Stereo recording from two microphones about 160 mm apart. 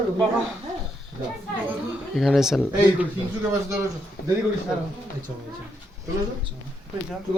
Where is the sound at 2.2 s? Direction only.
Centre (ahead or behind).